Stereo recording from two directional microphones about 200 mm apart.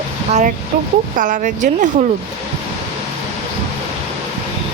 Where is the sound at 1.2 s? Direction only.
40° right (ahead or behind).